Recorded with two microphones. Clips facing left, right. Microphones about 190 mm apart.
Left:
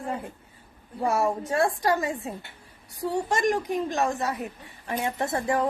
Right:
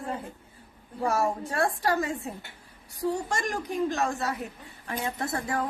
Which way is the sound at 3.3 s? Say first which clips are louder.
Left 6 dB; 15° left (ahead or behind).